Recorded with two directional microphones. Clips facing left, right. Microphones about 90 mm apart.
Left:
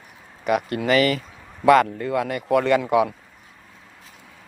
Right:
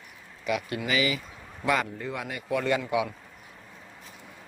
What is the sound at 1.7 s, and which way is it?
Speech, 75° left (ahead or behind).